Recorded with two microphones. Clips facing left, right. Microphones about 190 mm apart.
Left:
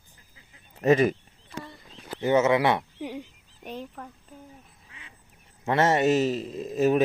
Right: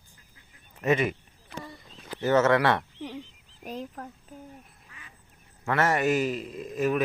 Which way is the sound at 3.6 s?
Centre (ahead or behind).